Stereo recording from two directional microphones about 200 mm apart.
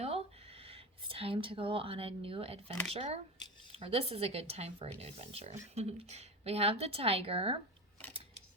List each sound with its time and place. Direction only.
0.6 s a woman's voice: 30° right (ahead or behind)